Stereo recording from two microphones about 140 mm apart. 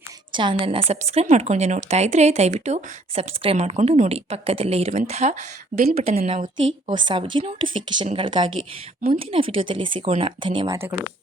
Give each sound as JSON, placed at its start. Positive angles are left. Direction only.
{"t": 0.3, "sound": "a woman's voice", "side_deg": -35}
{"t": 6.2, "sound": "a woman's voice", "side_deg": -45}
{"t": 10.7, "sound": "speech", "side_deg": -15}